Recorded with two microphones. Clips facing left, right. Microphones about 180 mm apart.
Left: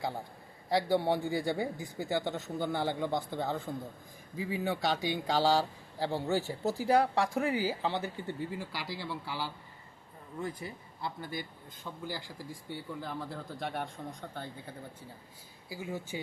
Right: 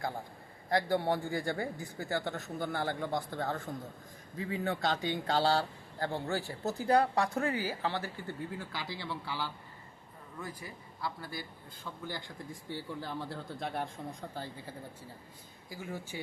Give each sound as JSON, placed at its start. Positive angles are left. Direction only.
{"t": 0.7, "sound": "speech", "side_deg": 20}
{"t": 10.4, "sound": "speech", "side_deg": 25}
{"t": 11.9, "sound": "speech", "side_deg": 10}
{"t": 15.7, "sound": "speech", "side_deg": 15}